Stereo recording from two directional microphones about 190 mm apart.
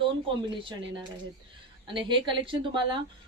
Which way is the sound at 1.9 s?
25° right (ahead or behind).